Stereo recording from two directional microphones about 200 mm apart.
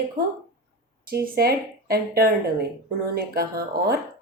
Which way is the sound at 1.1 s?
50° right (ahead or behind).